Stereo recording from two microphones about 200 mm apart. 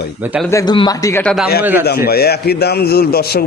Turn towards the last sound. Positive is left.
turn(degrees=50)  # may be behind; listen again after turning